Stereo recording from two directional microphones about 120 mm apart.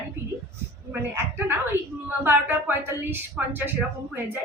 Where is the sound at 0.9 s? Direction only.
20° right (ahead or behind).